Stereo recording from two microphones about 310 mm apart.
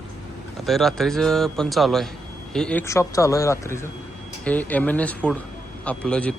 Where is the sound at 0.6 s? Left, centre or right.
Centre.